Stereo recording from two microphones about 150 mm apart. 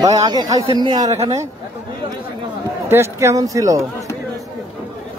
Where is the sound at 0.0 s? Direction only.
25° right (ahead or behind).